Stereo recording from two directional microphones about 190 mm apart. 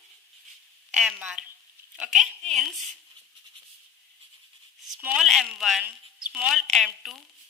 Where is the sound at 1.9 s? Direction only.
Centre (ahead or behind).